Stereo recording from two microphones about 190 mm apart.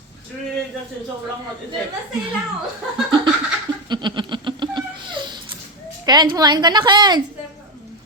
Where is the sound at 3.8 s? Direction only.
25° right (ahead or behind).